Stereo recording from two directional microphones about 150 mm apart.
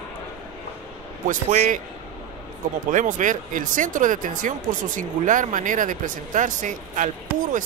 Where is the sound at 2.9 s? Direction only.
60° right (ahead or behind).